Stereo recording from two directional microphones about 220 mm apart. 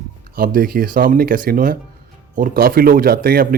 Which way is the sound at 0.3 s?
40° right (ahead or behind).